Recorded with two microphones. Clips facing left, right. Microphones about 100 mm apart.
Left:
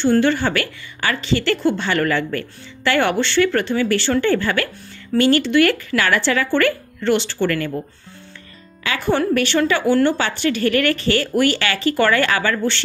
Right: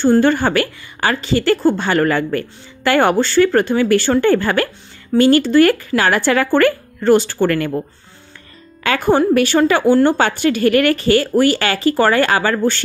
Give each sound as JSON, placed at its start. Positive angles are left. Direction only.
{"t": 0.0, "sound": "a woman's voice", "side_deg": -45}
{"t": 8.8, "sound": "a woman's voice", "side_deg": -45}